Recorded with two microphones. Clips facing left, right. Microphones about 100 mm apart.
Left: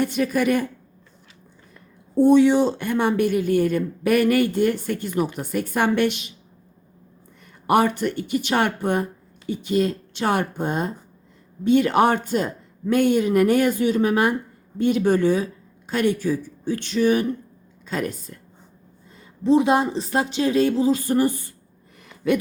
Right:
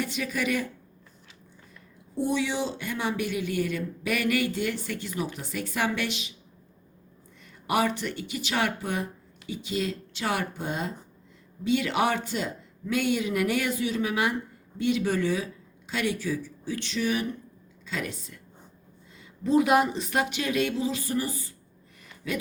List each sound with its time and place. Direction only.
0.0 s speech: 50° left (ahead or behind)
2.1 s speech: 50° left (ahead or behind)
7.7 s speech: 50° left (ahead or behind)
19.4 s speech: 25° left (ahead or behind); by 21.5 s 60° left (ahead or behind)